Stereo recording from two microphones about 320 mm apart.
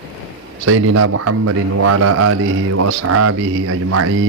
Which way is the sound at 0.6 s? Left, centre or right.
Right.